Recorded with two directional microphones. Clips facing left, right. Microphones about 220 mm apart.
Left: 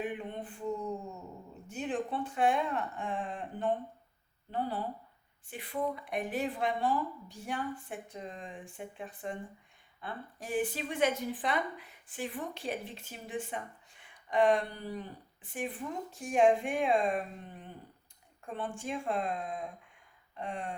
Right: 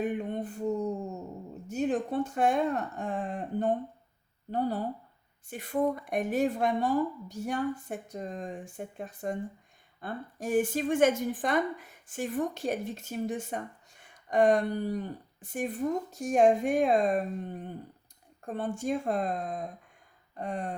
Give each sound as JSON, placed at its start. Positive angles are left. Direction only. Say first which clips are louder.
{"t": 0.0, "sound": "mantra", "louder": "right 6 dB", "side_deg": -45}
{"t": 1.6, "sound": "a woman's voice", "louder": "right 6 dB", "side_deg": -40}
{"t": 20.3, "sound": "a sound", "louder": "right 4 dB", "side_deg": -40}